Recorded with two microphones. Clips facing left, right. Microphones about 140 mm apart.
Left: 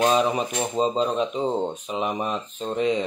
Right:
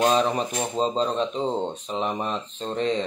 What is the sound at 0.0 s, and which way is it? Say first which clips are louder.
Speech: left 1 dB; 5° left (ahead or behind).